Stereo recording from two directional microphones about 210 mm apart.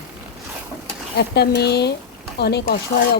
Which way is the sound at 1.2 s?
50° left (ahead or behind).